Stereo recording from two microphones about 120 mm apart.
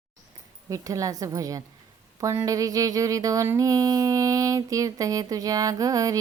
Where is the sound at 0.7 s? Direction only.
30° right (ahead or behind).